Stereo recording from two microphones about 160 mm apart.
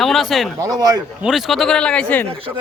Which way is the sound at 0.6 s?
25° right (ahead or behind).